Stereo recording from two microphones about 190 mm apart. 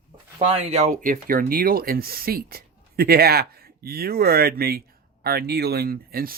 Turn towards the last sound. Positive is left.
turn(degrees=-50)  # may be behind; listen again after turning